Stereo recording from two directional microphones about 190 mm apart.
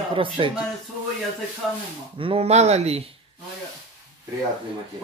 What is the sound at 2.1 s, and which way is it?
Speech, 30° right (ahead or behind).